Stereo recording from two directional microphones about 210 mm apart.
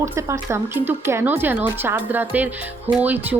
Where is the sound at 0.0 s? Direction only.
15° right (ahead or behind).